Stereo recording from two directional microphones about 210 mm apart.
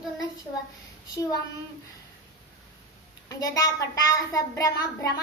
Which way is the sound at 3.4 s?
15° left (ahead or behind).